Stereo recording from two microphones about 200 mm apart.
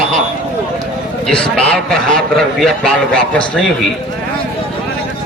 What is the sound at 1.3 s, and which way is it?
A man's voice, 5° left (ahead or behind).